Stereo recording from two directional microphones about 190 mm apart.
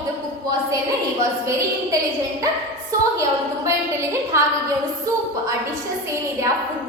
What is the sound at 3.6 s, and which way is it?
Speech, 15° right (ahead or behind).